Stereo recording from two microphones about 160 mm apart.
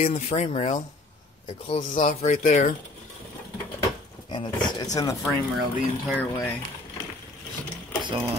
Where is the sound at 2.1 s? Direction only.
50° left (ahead or behind).